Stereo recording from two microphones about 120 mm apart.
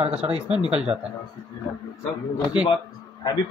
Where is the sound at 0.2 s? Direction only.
60° right (ahead or behind).